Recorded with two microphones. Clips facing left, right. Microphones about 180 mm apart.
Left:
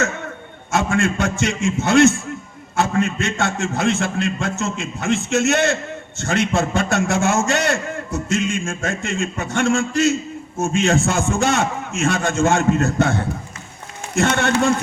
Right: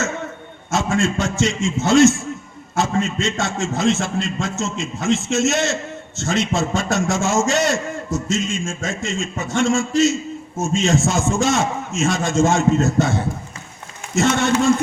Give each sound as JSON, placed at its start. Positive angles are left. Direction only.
{"t": 0.7, "sound": "a man's voice", "side_deg": 60}